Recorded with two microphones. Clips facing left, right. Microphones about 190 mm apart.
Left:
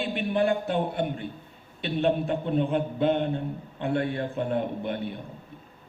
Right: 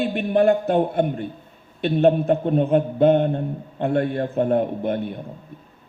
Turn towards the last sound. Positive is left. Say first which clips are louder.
# right 7 dB
turn(degrees=-45)  # may be behind; listen again after turning